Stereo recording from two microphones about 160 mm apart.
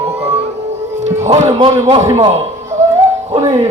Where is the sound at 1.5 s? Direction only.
30° right (ahead or behind).